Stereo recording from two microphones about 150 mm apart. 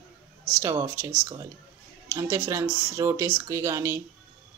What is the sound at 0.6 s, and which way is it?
Speech, 20° right (ahead or behind).